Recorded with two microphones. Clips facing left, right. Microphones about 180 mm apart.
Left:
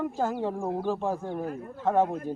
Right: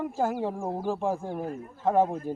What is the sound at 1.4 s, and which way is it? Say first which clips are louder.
Speech: left 1 dB; 60° left (ahead or behind).